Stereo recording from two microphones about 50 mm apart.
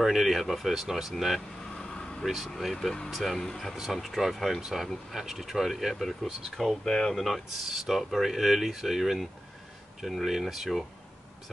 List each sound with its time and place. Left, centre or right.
0.0 s speech: centre